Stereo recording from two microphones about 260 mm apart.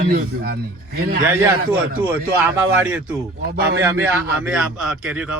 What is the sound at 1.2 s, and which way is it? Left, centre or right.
Speech, centre.